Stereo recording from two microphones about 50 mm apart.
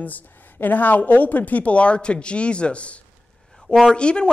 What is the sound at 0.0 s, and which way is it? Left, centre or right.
A woman's voice, left.